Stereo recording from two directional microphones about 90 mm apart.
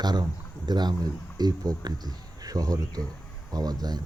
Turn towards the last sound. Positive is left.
turn(degrees=-45)  # may be behind; listen again after turning